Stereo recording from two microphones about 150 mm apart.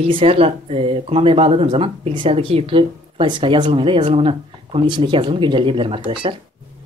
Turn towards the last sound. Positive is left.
turn(degrees=-40)  # may be behind; listen again after turning